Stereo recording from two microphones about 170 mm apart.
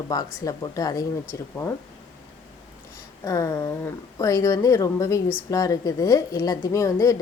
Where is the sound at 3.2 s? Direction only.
20° left (ahead or behind).